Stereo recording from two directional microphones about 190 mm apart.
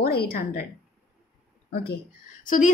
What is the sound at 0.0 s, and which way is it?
Speech, 55° left (ahead or behind).